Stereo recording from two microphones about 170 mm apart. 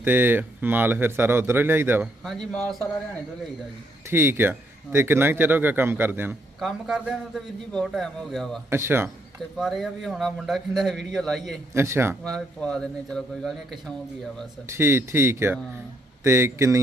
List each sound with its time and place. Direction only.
0.0 s a man's voice: 10° right (ahead or behind)
2.2 s a man's voice: centre (ahead or behind)
4.0 s a man's voice: 15° right (ahead or behind)
6.6 s a man's voice: centre (ahead or behind)
8.7 s a man's voice: 15° right (ahead or behind)
9.6 s a man's voice: centre (ahead or behind)
11.7 s a man's voice: 15° right (ahead or behind)
12.2 s a man's voice: 5° left (ahead or behind)
14.7 s a man's voice: 15° right (ahead or behind)